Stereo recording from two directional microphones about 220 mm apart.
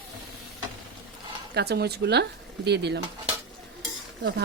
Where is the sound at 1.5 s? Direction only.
45° right (ahead or behind).